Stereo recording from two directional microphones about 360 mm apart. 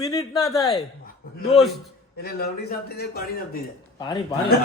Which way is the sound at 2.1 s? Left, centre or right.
Left.